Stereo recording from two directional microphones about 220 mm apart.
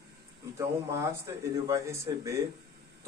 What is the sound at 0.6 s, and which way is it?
Speech, 15° right (ahead or behind).